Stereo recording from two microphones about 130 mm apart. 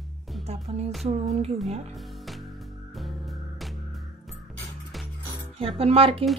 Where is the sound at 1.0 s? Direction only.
60° right (ahead or behind).